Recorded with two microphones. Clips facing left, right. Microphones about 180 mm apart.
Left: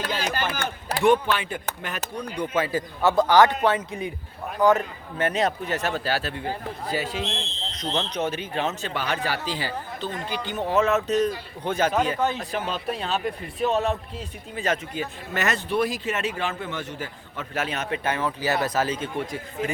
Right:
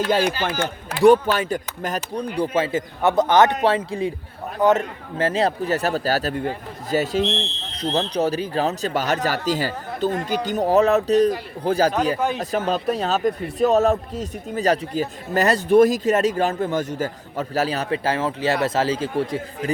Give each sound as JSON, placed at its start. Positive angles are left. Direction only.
{"t": 0.0, "sound": "a man's voice", "side_deg": -50}
{"t": 1.0, "sound": "a man's voice", "side_deg": -40}
{"t": 7.3, "sound": "a man's voice", "side_deg": -65}
{"t": 7.8, "sound": "speech", "side_deg": -35}